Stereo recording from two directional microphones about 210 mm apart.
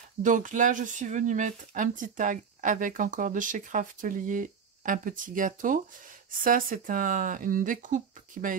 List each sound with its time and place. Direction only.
0.2 s speech: 40° right (ahead or behind)